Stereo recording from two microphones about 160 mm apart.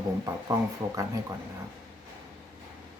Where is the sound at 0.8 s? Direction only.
25° right (ahead or behind).